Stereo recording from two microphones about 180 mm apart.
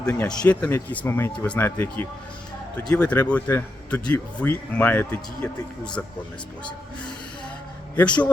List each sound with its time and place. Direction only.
0.0 s speech: 10° left (ahead or behind)
7.9 s speech: 5° left (ahead or behind)